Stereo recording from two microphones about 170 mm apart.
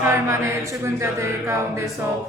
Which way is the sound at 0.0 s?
15° right (ahead or behind).